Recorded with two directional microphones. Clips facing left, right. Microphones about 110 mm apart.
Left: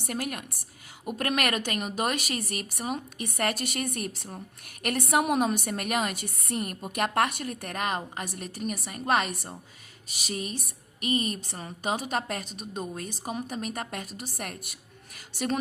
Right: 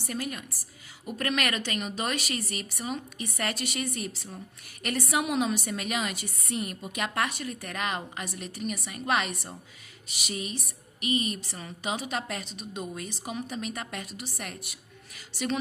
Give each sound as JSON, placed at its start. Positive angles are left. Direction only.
{"t": 0.0, "sound": "a woman's voice", "side_deg": 60}
{"t": 1.0, "sound": "speech", "side_deg": 50}